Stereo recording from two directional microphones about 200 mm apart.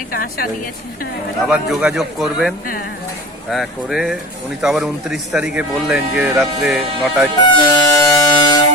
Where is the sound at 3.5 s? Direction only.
Centre (ahead or behind).